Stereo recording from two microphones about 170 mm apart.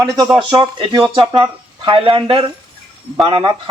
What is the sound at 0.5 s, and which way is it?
Speech, 25° right (ahead or behind).